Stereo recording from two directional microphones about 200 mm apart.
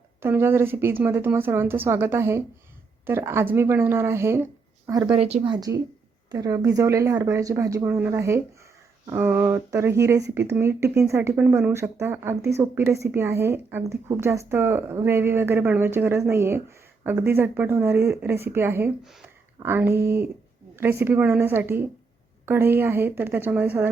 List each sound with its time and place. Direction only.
0.2 s a woman's voice: 10° right (ahead or behind); by 5.5 s 30° right (ahead or behind)
5.5 s a woman's voice: 20° right (ahead or behind)